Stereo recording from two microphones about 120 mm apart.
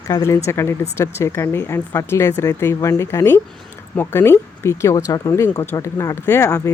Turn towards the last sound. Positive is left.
turn(degrees=20)  # may be behind; listen again after turning